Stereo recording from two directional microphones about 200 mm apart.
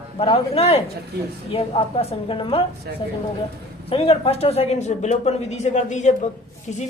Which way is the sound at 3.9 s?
25° left (ahead or behind).